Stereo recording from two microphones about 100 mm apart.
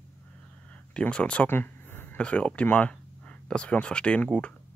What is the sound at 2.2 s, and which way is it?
Speech, 10° left (ahead or behind).